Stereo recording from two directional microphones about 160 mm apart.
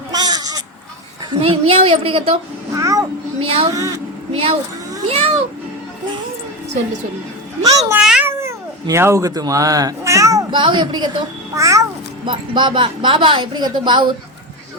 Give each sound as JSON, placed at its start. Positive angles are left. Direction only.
{"t": 0.1, "sound": "bleat", "side_deg": -25}
{"t": 1.3, "sound": "a woman's voice", "side_deg": -35}
{"t": 2.7, "sound": "vehicle", "side_deg": -20}
{"t": 3.4, "sound": "a woman's voice", "side_deg": -35}
{"t": 3.7, "sound": "a child's voice", "side_deg": -20}
{"t": 4.3, "sound": "a woman's voice", "side_deg": -35}
{"t": 7.6, "sound": "a child's voice", "side_deg": -20}
{"t": 7.9, "sound": "cat", "side_deg": -5}
{"t": 8.4, "sound": "speech", "side_deg": -15}
{"t": 12.2, "sound": "a woman's voice", "side_deg": -30}